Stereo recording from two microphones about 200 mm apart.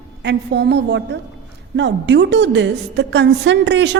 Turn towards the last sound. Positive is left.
turn(degrees=-65)  # may be behind; listen again after turning